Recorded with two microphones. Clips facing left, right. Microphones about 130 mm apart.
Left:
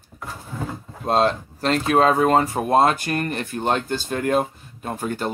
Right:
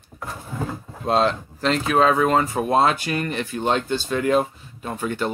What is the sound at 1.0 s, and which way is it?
Speech, 40° left (ahead or behind).